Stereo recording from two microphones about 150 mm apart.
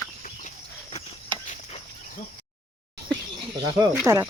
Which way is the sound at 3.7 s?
30° right (ahead or behind).